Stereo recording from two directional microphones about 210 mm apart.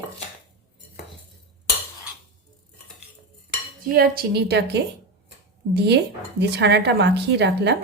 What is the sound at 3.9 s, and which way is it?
Speech, 45° right (ahead or behind).